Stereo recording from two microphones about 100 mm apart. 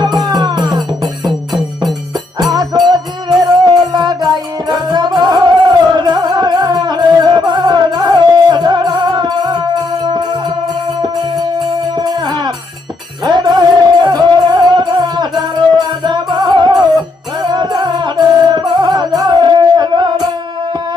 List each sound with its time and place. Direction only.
0.0 s music: 40° right (ahead or behind)
2.8 s music: 45° right (ahead or behind)
11.9 s music: 45° right (ahead or behind)